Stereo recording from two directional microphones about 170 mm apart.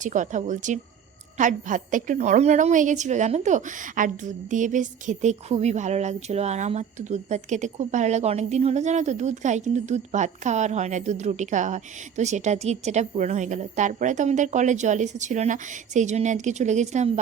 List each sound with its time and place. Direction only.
0.0 s a woman's voice: 45° right (ahead or behind)